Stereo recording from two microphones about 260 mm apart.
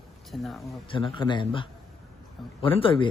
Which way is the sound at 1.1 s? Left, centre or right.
Centre.